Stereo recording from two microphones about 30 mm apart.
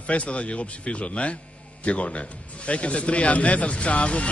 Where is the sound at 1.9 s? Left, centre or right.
Left.